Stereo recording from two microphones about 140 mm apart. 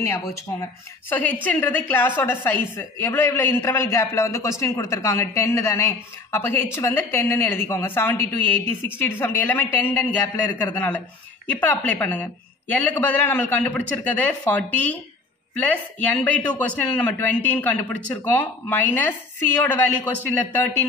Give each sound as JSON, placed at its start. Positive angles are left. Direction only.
{"t": 0.0, "sound": "a woman's voice", "side_deg": 20}
{"t": 11.6, "sound": "a woman's voice", "side_deg": 10}
{"t": 20.2, "sound": "a woman's voice", "side_deg": 15}